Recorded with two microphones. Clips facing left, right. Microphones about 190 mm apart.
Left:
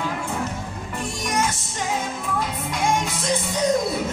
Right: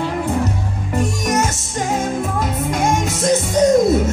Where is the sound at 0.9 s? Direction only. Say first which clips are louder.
Right 7 dB; 45° right (ahead or behind).